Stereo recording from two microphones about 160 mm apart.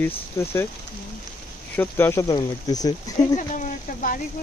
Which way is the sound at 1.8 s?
15° left (ahead or behind).